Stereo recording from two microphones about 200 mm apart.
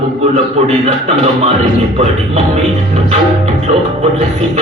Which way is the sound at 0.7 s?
30° right (ahead or behind).